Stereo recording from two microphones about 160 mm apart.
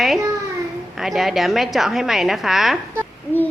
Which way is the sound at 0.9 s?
Centre (ahead or behind).